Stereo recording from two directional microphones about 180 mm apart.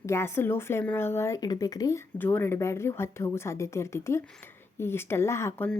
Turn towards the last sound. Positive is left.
turn(degrees=15)  # may be behind; listen again after turning